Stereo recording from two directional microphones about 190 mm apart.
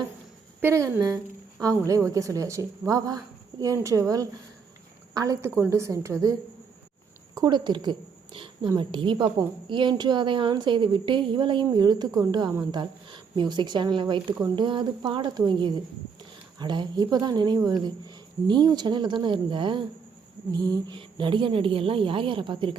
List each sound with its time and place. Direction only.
0.6 s a woman's voice: 15° right (ahead or behind)
7.3 s a woman's voice: 20° right (ahead or behind)